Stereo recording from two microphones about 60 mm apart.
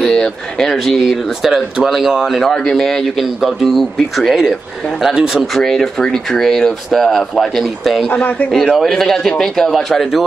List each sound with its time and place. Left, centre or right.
0.0 s speech: centre
5.6 s speech: centre
8.1 s a man's voice: left
8.7 s speech: centre